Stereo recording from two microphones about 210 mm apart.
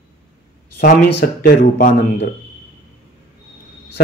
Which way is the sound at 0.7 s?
45° left (ahead or behind).